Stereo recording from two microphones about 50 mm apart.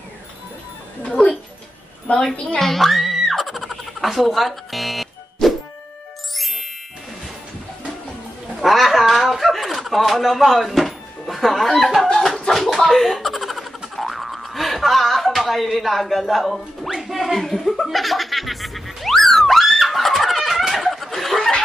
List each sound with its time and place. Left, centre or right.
1.0 s speech: left
2.6 s a sound: centre
6.3 s ding: centre
8.5 s a sound: centre
12.4 s slap: centre
13.9 s boing: centre
17.1 s speech: centre
17.8 s music: centre